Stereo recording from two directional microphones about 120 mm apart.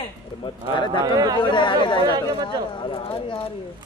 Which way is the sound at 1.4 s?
40° left (ahead or behind).